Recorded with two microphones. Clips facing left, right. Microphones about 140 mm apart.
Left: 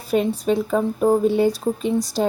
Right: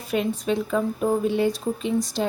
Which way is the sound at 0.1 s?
35° left (ahead or behind).